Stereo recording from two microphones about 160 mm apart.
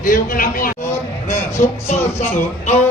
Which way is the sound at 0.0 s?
60° left (ahead or behind).